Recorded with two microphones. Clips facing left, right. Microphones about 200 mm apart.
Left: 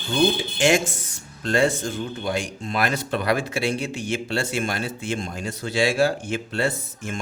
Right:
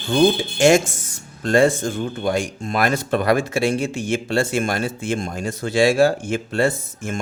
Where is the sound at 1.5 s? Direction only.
45° right (ahead or behind).